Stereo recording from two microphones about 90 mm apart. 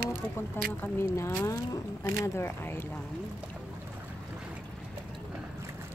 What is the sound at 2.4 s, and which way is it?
Speech, 25° left (ahead or behind).